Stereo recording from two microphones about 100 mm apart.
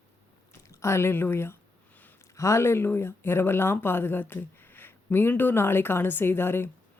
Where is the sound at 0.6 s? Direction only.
30° left (ahead or behind).